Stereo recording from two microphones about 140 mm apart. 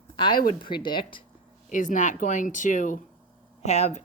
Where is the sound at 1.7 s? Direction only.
70° left (ahead or behind).